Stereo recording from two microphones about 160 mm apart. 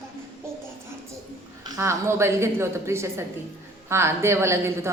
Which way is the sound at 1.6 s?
15° right (ahead or behind).